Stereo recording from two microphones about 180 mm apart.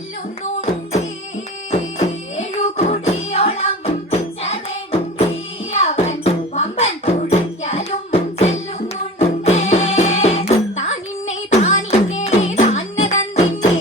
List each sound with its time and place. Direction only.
1.7 s music: 40° left (ahead or behind)